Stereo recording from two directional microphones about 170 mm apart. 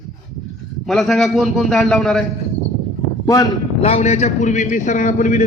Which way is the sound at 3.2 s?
20° left (ahead or behind).